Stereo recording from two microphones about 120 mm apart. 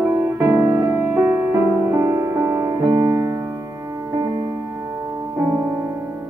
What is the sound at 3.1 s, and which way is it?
Music, 25° right (ahead or behind).